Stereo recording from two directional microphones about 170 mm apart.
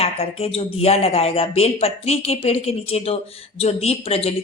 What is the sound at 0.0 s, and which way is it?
Speech, 35° left (ahead or behind).